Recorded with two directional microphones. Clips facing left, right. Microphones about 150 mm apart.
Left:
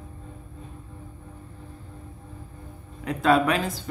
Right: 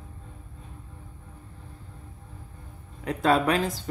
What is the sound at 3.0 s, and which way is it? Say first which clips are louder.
Speech: left 2 dB; 35° right (ahead or behind).